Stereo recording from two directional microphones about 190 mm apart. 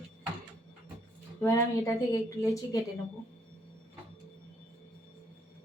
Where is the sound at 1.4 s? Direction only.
15° left (ahead or behind).